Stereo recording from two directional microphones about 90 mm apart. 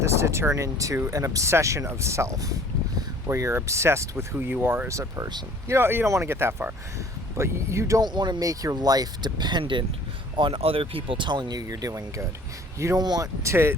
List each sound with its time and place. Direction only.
0.0 s speech: 30° right (ahead or behind)
4.9 s speech: 40° right (ahead or behind)
8.0 s speech: 55° right (ahead or behind)
8.4 s speech: 40° right (ahead or behind); by 9.8 s 60° right (ahead or behind)
10.3 s speech: 75° right (ahead or behind); by 11.6 s 55° right (ahead or behind)
11.6 s speech: 40° right (ahead or behind)
13.0 s speech: 50° right (ahead or behind)
13.4 s speech: 30° right (ahead or behind)